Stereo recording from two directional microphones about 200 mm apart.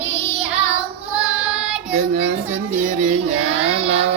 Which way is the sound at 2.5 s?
35° right (ahead or behind).